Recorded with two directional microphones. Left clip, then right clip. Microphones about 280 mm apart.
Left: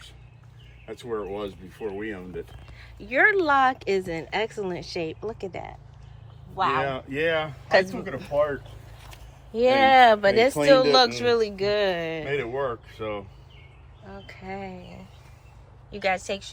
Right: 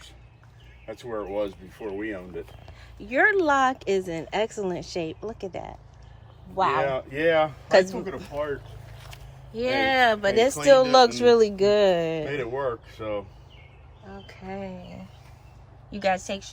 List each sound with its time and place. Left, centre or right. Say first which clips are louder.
0.9 s speech: left 1 dB; right
3.0 s speech: left 1 dB; centre
6.8 s speech: right 2 dB; right
7.7 s speech: even; centre
9.0 s speech: right 1 dB; centre
14.1 s speech: left 1 dB; centre